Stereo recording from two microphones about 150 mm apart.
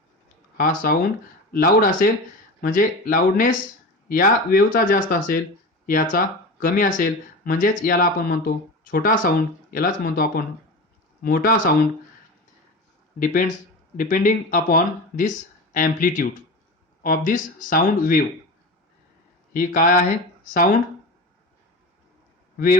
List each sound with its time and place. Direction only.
0.5 s speech: 70° left (ahead or behind)
13.1 s speech: 65° left (ahead or behind)
19.5 s speech: 65° left (ahead or behind)
22.5 s a man's voice: 70° left (ahead or behind)